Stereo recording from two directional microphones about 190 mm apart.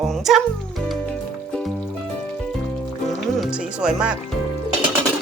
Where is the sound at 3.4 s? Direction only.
5° right (ahead or behind).